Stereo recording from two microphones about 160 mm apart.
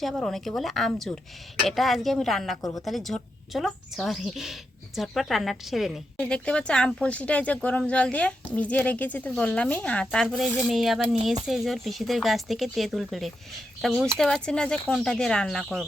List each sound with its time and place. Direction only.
0.0 s speech: centre (ahead or behind)
2.6 s a woman's voice: 20° left (ahead or behind)
2.8 s a woman's voice: centre (ahead or behind)